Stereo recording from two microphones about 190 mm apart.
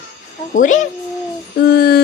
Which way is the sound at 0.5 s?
40° left (ahead or behind).